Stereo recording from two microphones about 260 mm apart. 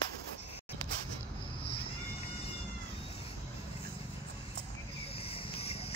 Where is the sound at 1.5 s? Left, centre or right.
Left.